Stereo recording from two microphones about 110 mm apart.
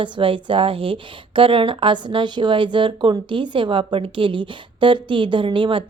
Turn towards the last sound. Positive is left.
turn(degrees=-50)  # may be behind; listen again after turning